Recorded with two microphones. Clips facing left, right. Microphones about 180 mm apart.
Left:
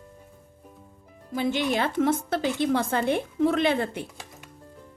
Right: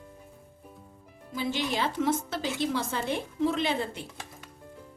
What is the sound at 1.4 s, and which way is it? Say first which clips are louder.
A woman's voice: left 5 dB; 55° left (ahead or behind).